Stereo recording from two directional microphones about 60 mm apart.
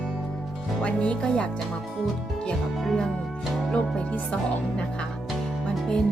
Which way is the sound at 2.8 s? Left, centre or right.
Centre.